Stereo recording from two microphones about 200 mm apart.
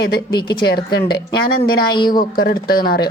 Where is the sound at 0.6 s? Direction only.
55° left (ahead or behind).